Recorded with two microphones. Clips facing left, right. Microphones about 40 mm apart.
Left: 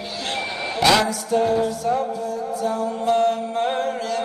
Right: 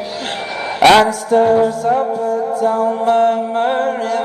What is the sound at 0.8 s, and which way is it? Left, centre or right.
Music, right.